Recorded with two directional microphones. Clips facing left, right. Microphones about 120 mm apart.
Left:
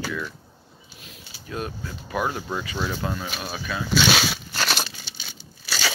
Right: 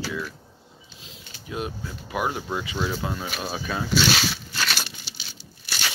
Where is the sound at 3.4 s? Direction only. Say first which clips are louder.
Right 1 dB; 35° right (ahead or behind).